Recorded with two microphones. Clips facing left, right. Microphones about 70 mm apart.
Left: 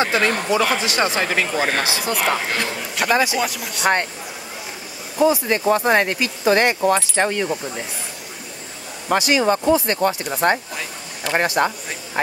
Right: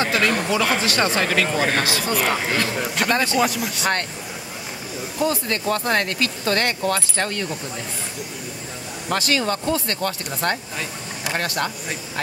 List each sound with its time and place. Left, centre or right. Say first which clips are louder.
0.0 s speech: left 1 dB; left
2.1 s speech: even; centre
5.2 s speech: left 6 dB; centre
9.1 s speech: left 5 dB; centre